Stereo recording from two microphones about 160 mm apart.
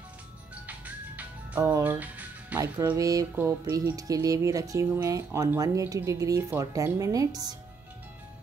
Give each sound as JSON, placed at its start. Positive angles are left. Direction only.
{"t": 0.7, "sound": "music", "side_deg": -10}
{"t": 2.6, "sound": "speech", "side_deg": -20}